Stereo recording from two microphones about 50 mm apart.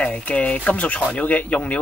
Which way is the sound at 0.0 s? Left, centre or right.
Left.